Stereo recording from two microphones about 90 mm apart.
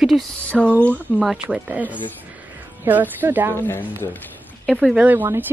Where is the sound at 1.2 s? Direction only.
10° right (ahead or behind).